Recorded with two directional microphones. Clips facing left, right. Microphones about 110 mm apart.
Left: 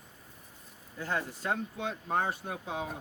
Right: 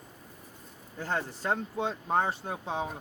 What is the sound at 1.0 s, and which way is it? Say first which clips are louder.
Speech: right 2 dB; 35° right (ahead or behind).